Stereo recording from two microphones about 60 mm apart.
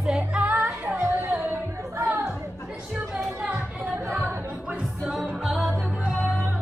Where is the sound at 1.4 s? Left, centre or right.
Right.